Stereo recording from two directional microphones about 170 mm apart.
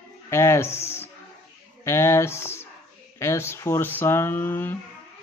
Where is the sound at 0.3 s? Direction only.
15° left (ahead or behind).